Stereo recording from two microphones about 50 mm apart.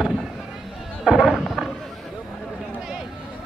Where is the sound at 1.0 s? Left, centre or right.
Centre.